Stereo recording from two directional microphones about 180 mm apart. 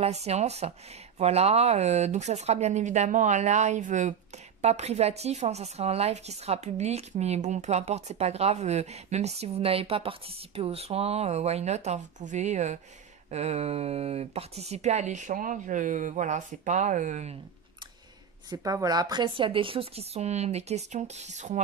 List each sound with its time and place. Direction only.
0.0 s speech: 35° right (ahead or behind)
18.5 s speech: 20° right (ahead or behind); by 21.5 s 40° right (ahead or behind)